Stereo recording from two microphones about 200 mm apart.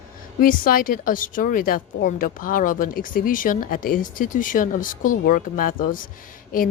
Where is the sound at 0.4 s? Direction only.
45° left (ahead or behind).